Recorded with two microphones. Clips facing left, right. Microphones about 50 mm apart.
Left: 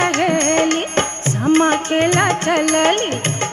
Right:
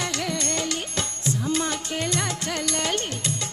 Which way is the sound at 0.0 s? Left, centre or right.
Left.